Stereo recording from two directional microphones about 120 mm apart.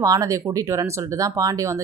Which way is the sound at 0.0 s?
30° right (ahead or behind).